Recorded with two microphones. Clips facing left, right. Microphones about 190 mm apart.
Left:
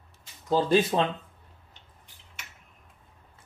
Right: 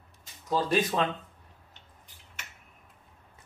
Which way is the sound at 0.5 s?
25° left (ahead or behind).